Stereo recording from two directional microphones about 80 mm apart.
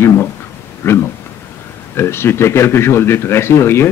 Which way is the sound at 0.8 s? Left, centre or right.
Left.